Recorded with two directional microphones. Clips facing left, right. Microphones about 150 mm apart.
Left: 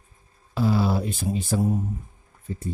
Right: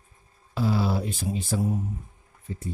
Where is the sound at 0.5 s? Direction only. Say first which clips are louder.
Left 3 dB; 50° left (ahead or behind).